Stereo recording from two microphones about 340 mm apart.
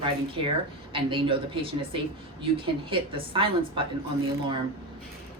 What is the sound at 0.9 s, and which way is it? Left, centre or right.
Speech, centre.